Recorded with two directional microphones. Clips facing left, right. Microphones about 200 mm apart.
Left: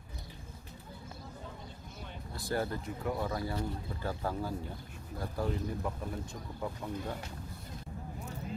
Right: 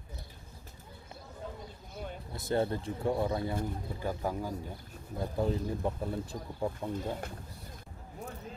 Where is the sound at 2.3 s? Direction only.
20° right (ahead or behind).